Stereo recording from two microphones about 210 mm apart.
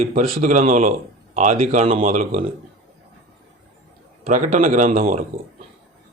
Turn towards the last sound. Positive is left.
turn(degrees=-40)  # may be behind; listen again after turning